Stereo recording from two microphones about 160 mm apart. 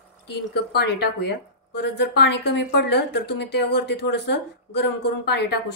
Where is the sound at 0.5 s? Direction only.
90° left.